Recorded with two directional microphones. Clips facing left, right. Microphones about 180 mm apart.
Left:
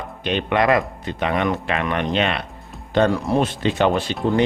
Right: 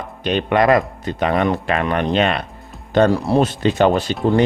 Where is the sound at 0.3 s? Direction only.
40° right (ahead or behind).